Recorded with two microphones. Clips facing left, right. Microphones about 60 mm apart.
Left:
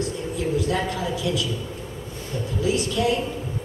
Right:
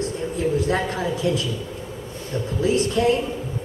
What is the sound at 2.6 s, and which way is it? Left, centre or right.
Speech, right.